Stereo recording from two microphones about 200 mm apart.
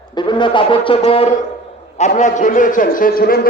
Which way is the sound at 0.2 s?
25° left (ahead or behind).